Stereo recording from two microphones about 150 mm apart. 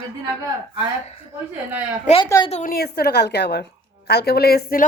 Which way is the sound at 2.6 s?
85° left.